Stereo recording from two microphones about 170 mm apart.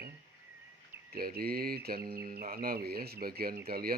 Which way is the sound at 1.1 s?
65° right (ahead or behind).